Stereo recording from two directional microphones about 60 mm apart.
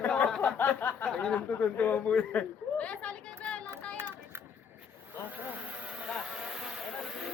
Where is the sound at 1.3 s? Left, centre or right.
Left.